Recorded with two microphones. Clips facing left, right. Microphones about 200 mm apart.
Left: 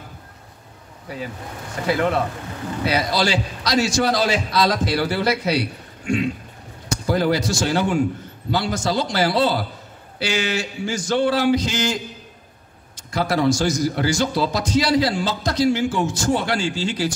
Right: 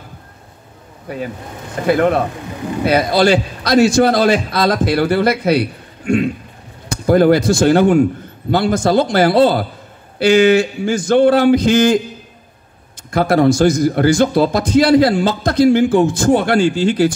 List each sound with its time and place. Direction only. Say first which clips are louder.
1.0 s a man's voice: right 6 dB; 55° right (ahead or behind)
13.1 s a man's voice: right 7 dB; 55° right (ahead or behind)